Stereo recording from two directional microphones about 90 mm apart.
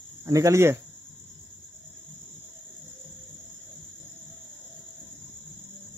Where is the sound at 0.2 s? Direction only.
35° right (ahead or behind).